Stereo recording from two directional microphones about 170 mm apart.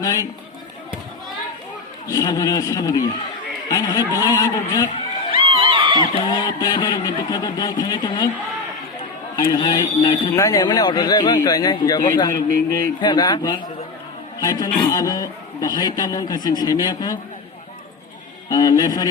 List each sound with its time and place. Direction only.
0.0 s speech: 20° left (ahead or behind)
2.0 s a man's voice: 20° left (ahead or behind)
5.3 s a sound: 30° right (ahead or behind)
6.1 s a man's voice: 25° left (ahead or behind)
9.3 s a man's voice: 20° left (ahead or behind)
18.4 s a man's voice: 20° left (ahead or behind)